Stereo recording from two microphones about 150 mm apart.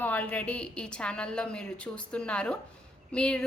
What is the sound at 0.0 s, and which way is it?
A woman's voice, 10° left (ahead or behind).